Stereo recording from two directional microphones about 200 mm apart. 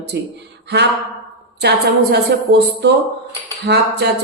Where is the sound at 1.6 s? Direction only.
55° right (ahead or behind).